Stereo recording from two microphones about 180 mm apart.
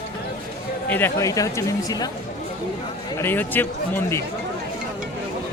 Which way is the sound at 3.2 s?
10° left (ahead or behind).